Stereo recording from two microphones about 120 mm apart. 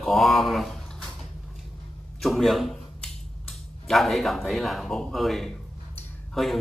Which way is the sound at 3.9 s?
Centre (ahead or behind).